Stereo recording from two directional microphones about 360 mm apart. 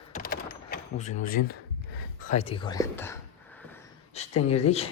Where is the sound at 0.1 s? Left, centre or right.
Left.